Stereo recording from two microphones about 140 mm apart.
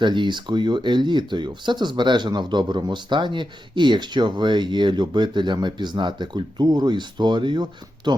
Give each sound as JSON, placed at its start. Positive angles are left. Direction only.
{"t": 0.0, "sound": "speech", "side_deg": -35}